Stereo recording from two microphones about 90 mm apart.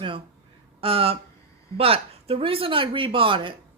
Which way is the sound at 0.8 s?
90° right.